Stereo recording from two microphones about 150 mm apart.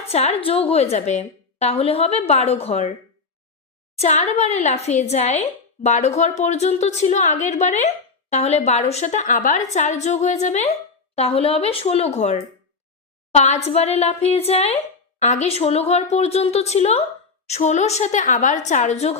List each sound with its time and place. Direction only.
0.1 s speech: 45° left (ahead or behind)
3.9 s speech: 45° left (ahead or behind)